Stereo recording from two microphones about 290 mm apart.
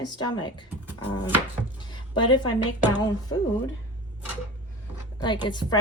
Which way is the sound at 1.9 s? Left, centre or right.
Centre.